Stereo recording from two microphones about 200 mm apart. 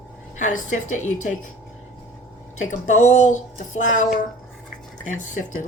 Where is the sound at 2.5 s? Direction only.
35° left (ahead or behind).